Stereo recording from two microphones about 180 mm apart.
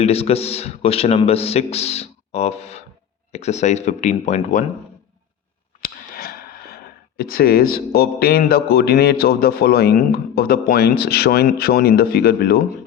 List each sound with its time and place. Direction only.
0.0 s a man's voice: 35° left (ahead or behind)
5.8 s a sound: 55° left (ahead or behind)
7.2 s a man's voice: 55° left (ahead or behind)